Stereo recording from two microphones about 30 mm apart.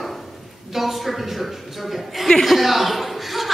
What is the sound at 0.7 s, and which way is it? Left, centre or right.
A man's voice, centre.